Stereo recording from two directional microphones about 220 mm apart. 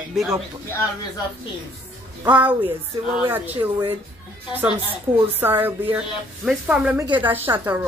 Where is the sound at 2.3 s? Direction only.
5° right (ahead or behind).